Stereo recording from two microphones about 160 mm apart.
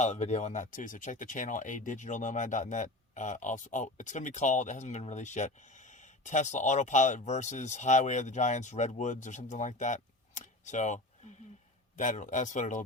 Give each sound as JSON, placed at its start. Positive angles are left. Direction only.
{"t": 0.0, "sound": "speech", "side_deg": 45}